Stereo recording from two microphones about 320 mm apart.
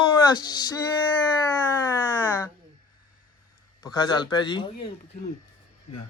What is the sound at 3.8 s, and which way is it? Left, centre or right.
Speech, centre.